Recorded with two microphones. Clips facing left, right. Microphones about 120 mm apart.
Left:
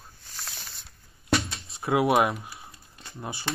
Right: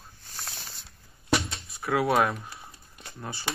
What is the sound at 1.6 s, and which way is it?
Speech, 25° left (ahead or behind).